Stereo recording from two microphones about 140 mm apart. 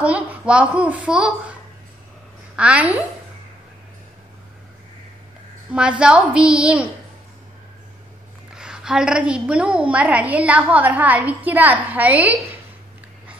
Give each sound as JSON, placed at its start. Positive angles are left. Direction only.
{"t": 0.0, "sound": "a woman's voice", "side_deg": -10}
{"t": 2.5, "sound": "a woman's voice", "side_deg": -10}
{"t": 5.7, "sound": "a woman's voice", "side_deg": -5}
{"t": 8.5, "sound": "a woman's voice", "side_deg": -5}